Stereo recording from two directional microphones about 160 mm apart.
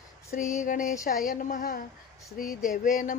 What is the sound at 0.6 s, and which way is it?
Speech, 55° left (ahead or behind).